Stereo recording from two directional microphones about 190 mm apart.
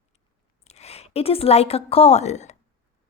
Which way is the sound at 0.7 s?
35° left (ahead or behind).